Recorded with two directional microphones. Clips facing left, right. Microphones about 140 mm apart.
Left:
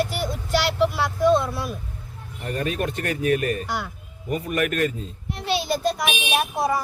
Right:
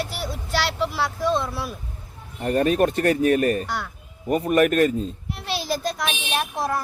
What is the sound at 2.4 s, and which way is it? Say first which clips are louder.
Speech: right 7 dB; 35° right (ahead or behind).